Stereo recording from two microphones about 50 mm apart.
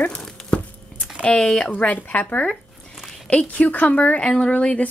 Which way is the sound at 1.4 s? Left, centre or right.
Centre.